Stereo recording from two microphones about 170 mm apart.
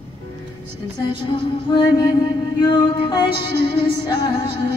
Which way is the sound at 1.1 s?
30° left (ahead or behind).